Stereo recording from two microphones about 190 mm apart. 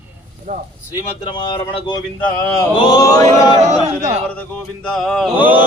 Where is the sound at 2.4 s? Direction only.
15° left (ahead or behind).